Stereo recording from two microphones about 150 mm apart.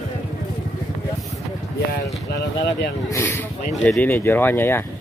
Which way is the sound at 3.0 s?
20° left (ahead or behind).